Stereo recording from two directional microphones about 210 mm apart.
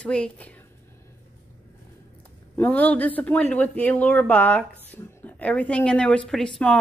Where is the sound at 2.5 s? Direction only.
10° left (ahead or behind).